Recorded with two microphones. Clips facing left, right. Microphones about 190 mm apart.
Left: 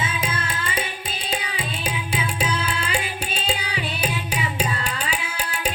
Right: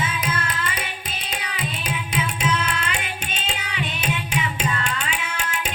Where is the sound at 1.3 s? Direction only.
30° left (ahead or behind).